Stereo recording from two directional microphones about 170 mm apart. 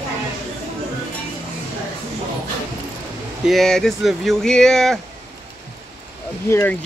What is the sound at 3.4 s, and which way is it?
Speech, centre (ahead or behind).